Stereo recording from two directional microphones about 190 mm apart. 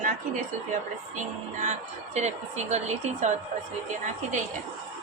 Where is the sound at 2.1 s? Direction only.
35° right (ahead or behind).